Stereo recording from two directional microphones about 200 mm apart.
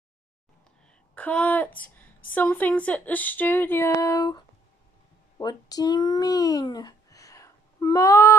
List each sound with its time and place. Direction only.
1.1 s a child's voice: 5° left (ahead or behind)